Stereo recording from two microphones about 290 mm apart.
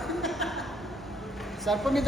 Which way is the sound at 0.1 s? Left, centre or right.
Centre.